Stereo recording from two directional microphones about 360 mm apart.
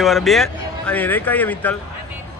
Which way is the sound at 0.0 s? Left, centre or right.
Centre.